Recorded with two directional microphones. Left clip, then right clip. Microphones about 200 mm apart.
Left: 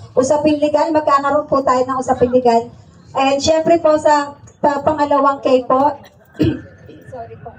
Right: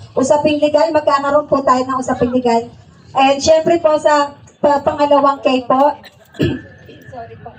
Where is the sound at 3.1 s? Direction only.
15° right (ahead or behind).